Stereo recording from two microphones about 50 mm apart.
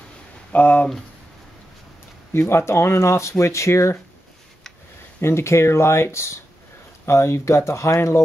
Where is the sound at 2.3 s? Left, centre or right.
Left.